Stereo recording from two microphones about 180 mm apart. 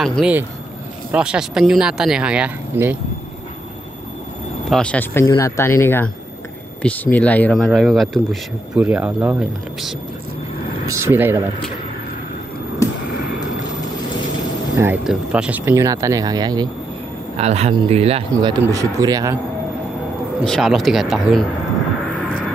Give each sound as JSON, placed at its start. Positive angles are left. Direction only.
{"t": 0.0, "sound": "speech", "side_deg": 0}
{"t": 4.6, "sound": "speech", "side_deg": 5}
{"t": 5.2, "sound": "speech", "side_deg": 20}
{"t": 10.9, "sound": "speech", "side_deg": -15}
{"t": 15.0, "sound": "speech", "side_deg": -5}
{"t": 17.4, "sound": "speech", "side_deg": -35}
{"t": 18.3, "sound": "speech", "side_deg": -20}
{"t": 20.4, "sound": "speech", "side_deg": 0}